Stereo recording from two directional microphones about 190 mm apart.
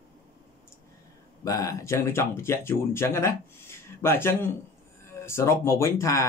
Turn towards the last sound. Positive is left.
turn(degrees=15)  # may be behind; listen again after turning